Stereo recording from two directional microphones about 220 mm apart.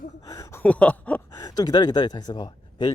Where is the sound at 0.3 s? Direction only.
15° left (ahead or behind).